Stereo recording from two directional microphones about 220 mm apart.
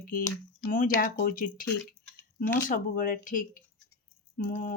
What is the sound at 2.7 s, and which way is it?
Speech, 40° left (ahead or behind).